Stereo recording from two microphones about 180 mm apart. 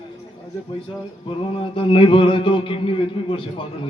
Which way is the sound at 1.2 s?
30° left (ahead or behind).